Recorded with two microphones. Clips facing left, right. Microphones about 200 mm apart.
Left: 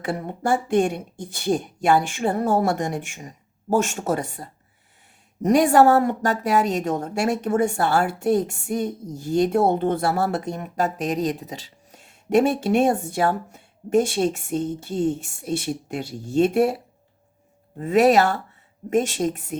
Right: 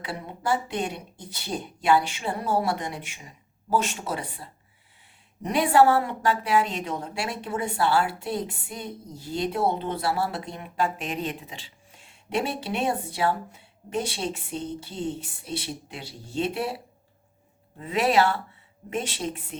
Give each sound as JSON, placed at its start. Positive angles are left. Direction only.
{"t": 0.0, "sound": "a woman's voice", "side_deg": 45}
{"t": 17.7, "sound": "a woman's voice", "side_deg": 45}